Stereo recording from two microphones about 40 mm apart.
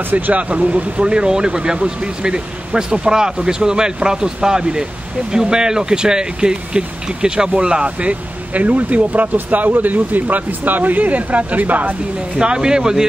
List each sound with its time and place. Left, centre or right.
0.1 s speech: right
12.4 s speech: right